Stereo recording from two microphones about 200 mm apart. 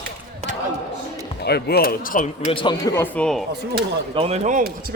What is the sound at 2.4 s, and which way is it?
Speech, 20° left (ahead or behind).